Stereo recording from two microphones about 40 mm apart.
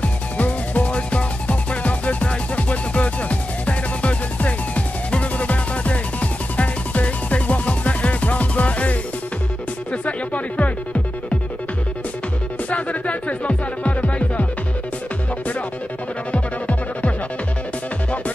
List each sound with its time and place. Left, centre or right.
0.0 s music: left
10.0 s music: left
12.6 s music: left
16.3 s music: left